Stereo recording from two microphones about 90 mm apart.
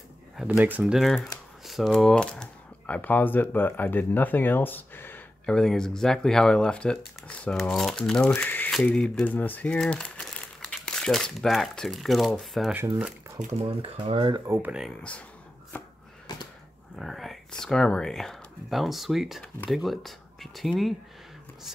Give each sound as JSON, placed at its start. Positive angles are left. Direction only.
{"t": 0.5, "sound": "speech", "side_deg": -20}
{"t": 0.9, "sound": "speech", "side_deg": 0}
{"t": 2.2, "sound": "typing", "side_deg": 10}
{"t": 3.0, "sound": "speech", "side_deg": 20}
{"t": 5.5, "sound": "speech", "side_deg": 5}
{"t": 8.4, "sound": "speech", "side_deg": 20}
{"t": 8.8, "sound": "speech", "side_deg": 10}
{"t": 9.3, "sound": "speech", "side_deg": 20}
{"t": 13.6, "sound": "speech", "side_deg": -90}
{"t": 16.3, "sound": "a sound", "side_deg": 50}
{"t": 16.9, "sound": "speech", "side_deg": 0}